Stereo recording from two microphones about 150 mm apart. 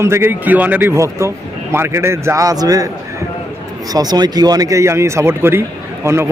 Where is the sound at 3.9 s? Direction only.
25° right (ahead or behind).